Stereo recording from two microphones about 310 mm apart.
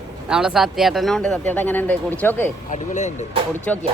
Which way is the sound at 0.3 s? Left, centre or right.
Centre.